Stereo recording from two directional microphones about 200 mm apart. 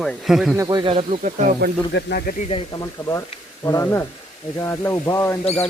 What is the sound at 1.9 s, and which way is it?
Speech, 55° left (ahead or behind).